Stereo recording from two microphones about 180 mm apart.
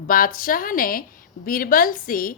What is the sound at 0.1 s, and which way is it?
A woman's voice, 50° left (ahead or behind).